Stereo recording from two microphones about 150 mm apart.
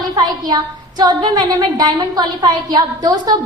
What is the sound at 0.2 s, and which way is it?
A woman's voice, 30° right (ahead or behind).